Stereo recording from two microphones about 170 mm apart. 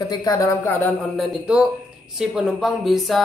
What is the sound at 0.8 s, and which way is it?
Speech, centre (ahead or behind).